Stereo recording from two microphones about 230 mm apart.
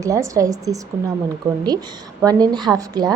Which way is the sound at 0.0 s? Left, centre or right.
Centre.